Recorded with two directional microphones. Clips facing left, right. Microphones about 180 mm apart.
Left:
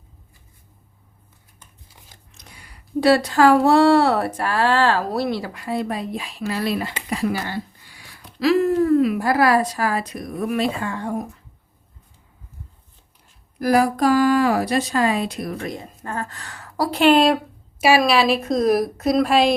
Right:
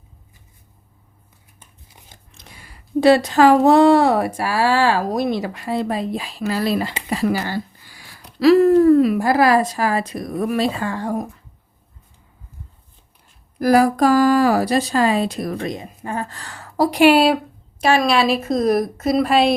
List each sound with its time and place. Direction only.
3.0 s speech: 20° right (ahead or behind)
7.4 s a sound: 35° right (ahead or behind)
9.0 s speech: 30° right (ahead or behind)
10.3 s speech: 40° right (ahead or behind)
13.7 s speech: 45° right (ahead or behind)
15.6 s a woman's voice: 15° right (ahead or behind)
16.3 s a woman's voice: 30° right (ahead or behind)
17.0 s a woman's voice: 10° right (ahead or behind)
17.7 s a woman's voice: 5° left (ahead or behind)